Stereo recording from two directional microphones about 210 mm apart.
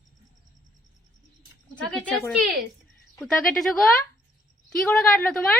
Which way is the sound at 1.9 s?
5° left (ahead or behind).